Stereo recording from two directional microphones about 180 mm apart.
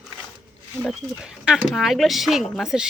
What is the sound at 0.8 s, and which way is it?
Speech, 5° right (ahead or behind).